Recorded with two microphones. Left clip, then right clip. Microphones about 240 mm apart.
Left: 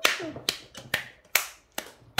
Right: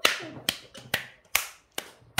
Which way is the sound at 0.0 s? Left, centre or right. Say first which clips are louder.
Even; centre.